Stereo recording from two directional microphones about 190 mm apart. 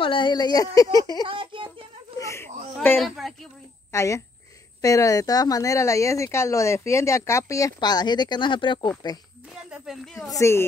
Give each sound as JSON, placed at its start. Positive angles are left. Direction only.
{"t": 0.0, "sound": "speech", "side_deg": 25}
{"t": 1.2, "sound": "child singing", "side_deg": -25}
{"t": 2.1, "sound": "a woman's voice", "side_deg": 15}
{"t": 9.9, "sound": "a woman's voice", "side_deg": -5}
{"t": 10.3, "sound": "speech", "side_deg": 15}